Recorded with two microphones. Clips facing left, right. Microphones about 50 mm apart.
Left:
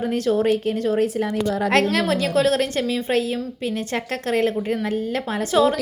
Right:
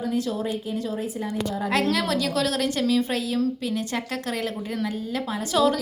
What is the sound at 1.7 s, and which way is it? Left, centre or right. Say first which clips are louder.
A woman's voice: left 3 dB; left.